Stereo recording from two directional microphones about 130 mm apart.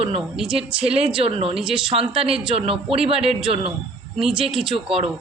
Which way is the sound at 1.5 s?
5° right (ahead or behind).